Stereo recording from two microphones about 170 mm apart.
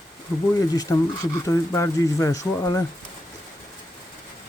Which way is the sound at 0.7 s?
20° left (ahead or behind).